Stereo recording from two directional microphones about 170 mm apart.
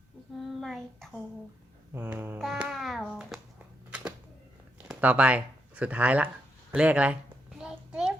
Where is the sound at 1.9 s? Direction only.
15° right (ahead or behind).